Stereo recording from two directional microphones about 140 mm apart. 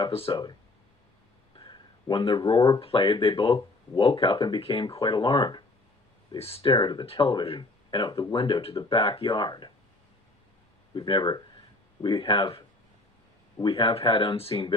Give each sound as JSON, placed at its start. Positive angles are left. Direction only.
{"t": 0.1, "sound": "speech", "side_deg": 45}
{"t": 1.5, "sound": "speech", "side_deg": 35}
{"t": 6.4, "sound": "speech", "side_deg": 45}
{"t": 10.9, "sound": "speech", "side_deg": 35}